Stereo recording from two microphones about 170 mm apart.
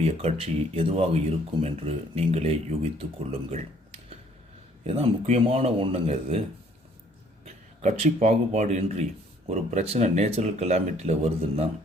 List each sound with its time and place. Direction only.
0.0 s speech: 40° right (ahead or behind)
4.8 s speech: 40° right (ahead or behind)
7.4 s a man's voice: 40° right (ahead or behind)